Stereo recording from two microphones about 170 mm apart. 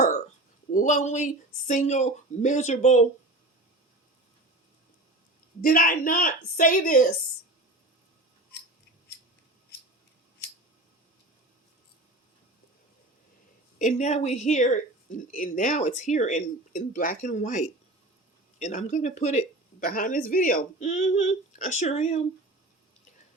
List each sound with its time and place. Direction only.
0.7 s speech: 50° left (ahead or behind)
5.6 s speech: 55° left (ahead or behind)
13.7 s speech: 45° left (ahead or behind)
19.8 s speech: 55° left (ahead or behind); by 22.2 s 40° left (ahead or behind)